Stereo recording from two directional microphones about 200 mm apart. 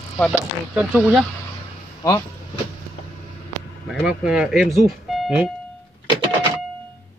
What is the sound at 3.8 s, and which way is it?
Speech, 5° right (ahead or behind).